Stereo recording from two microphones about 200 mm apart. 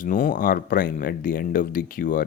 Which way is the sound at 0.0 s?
40° left (ahead or behind).